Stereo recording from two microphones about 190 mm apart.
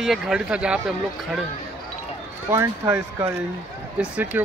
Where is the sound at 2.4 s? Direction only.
15° right (ahead or behind).